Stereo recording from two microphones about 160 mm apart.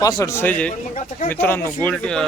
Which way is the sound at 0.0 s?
20° left (ahead or behind).